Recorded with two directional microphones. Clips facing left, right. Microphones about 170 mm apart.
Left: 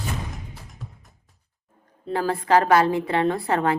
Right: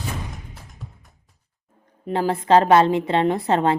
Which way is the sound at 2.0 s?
20° right (ahead or behind).